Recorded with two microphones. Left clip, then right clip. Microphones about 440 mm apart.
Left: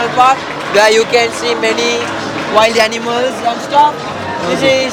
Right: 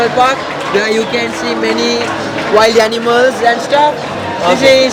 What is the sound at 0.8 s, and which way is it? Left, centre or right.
Speech, left.